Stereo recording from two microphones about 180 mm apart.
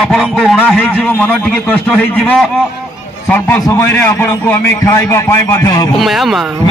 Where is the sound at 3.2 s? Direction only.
10° left (ahead or behind).